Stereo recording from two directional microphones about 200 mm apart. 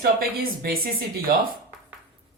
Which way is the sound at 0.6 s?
50° right (ahead or behind).